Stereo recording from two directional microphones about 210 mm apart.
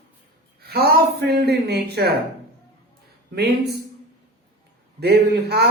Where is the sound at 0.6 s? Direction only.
50° right (ahead or behind).